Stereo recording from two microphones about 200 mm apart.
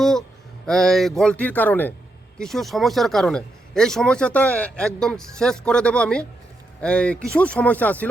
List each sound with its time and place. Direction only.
0.0 s speech: centre (ahead or behind)